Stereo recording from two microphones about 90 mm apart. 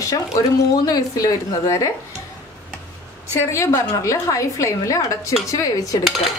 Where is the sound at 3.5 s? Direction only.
35° left (ahead or behind).